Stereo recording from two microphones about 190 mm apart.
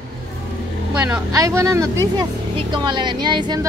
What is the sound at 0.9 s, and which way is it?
A woman's voice, 5° right (ahead or behind).